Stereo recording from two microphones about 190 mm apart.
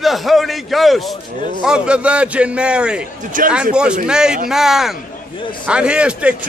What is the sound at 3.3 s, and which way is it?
Speech, 45° right (ahead or behind).